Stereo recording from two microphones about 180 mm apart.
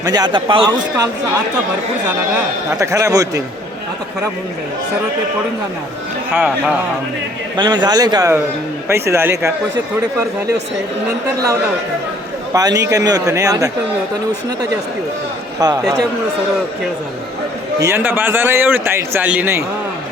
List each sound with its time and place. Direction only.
0.0 s a man's voice: 20° right (ahead or behind)
2.7 s a man's voice: 15° right (ahead or behind)
6.3 s a man's voice: 10° right (ahead or behind)
7.5 s a man's voice: 25° right (ahead or behind)
12.5 s a man's voice: 20° right (ahead or behind)
15.5 s a man's voice: 20° right (ahead or behind)
17.7 s a man's voice: 15° right (ahead or behind)